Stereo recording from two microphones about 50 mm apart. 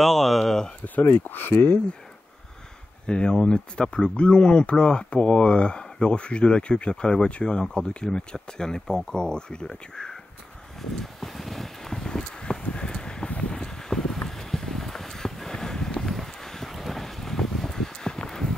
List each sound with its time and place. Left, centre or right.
0.0 s speech: centre
1.1 s speech: left
3.1 s speech: centre
10.8 s a sound: centre
13.3 s clip-clop: centre
15.9 s a sound: centre